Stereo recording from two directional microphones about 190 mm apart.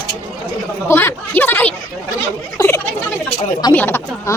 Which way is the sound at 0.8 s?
10° left (ahead or behind).